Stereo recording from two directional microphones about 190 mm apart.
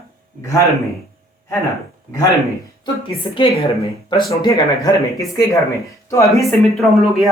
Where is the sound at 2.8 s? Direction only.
30° left (ahead or behind).